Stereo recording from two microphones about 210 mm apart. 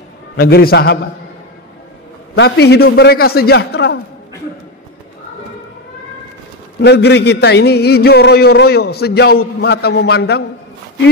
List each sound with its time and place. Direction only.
0.4 s a man's voice: 45° left (ahead or behind)
2.3 s a man's voice: 55° left (ahead or behind)
6.8 s a man's voice: 50° left (ahead or behind)